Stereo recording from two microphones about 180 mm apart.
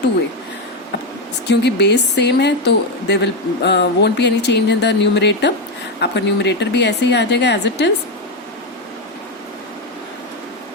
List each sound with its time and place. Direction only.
1.5 s speech: 70° left (ahead or behind)